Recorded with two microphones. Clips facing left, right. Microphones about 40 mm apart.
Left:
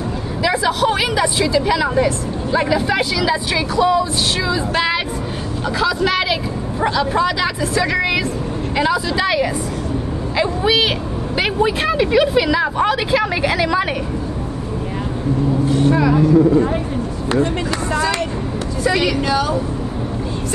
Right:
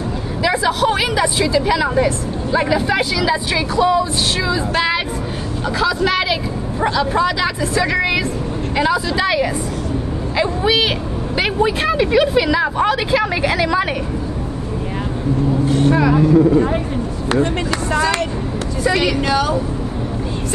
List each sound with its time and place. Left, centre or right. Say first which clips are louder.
0.4 s speech: even; centre
15.7 s vehicle: right 1 dB; right
16.2 s speech: even; right
17.4 s speech: even; right
18.9 s speech: even; centre
19.2 s speech: right 1 dB; right